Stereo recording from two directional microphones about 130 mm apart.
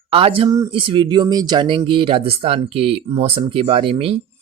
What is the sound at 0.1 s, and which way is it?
Speech, 45° right (ahead or behind).